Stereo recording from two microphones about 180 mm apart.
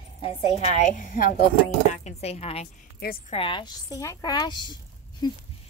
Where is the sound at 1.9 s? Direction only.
40° left (ahead or behind).